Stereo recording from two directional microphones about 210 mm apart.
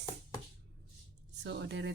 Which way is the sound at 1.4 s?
55° right (ahead or behind).